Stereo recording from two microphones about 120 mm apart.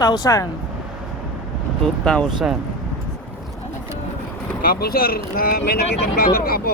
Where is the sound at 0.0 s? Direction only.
30° left (ahead or behind).